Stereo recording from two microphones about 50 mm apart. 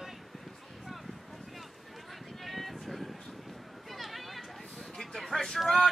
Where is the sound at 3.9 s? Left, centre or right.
Centre.